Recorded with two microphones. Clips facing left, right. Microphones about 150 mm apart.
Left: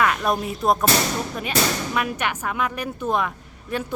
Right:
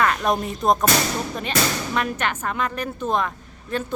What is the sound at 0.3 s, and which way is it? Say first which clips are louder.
Speech: right 1 dB; 5° left (ahead or behind).